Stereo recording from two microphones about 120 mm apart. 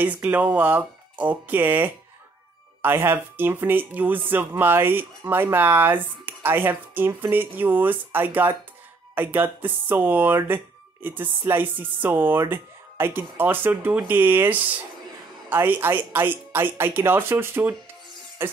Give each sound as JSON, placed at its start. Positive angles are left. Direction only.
{"t": 0.0, "sound": "speech", "side_deg": -15}
{"t": 18.4, "sound": "music", "side_deg": -20}